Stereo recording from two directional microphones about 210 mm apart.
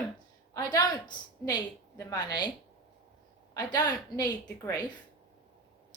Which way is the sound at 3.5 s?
20° left (ahead or behind).